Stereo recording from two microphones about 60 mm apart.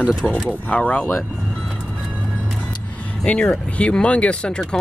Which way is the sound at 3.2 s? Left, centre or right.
Centre.